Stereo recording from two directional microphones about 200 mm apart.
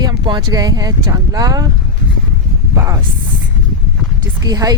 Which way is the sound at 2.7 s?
15° right (ahead or behind).